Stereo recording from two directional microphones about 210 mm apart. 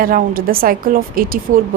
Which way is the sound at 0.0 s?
40° right (ahead or behind).